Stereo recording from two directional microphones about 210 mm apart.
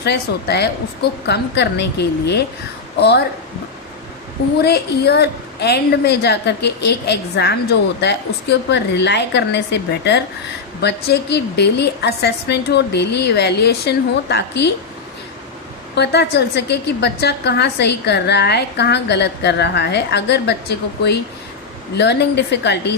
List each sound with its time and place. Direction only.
0.0 s a woman's voice: 50° left (ahead or behind)
4.6 s a woman's voice: 50° left (ahead or behind)
16.0 s a woman's voice: 50° left (ahead or behind)